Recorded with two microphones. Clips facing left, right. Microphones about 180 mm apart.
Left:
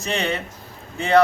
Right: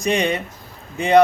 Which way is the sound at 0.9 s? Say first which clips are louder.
Right 3 dB; 15° right (ahead or behind).